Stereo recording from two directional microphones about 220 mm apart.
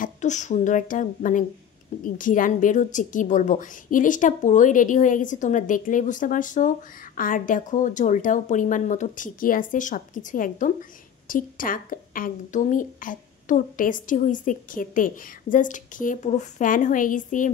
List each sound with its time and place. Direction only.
0.0 s speech: 35° left (ahead or behind)